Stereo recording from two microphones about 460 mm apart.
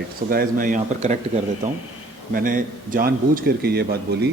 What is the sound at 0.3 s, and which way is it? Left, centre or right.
Speech, centre.